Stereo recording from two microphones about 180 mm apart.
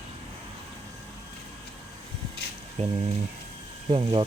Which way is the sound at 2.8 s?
40° right (ahead or behind).